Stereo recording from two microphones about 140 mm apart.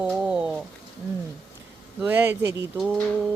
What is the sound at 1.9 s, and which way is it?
Speech, 15° right (ahead or behind).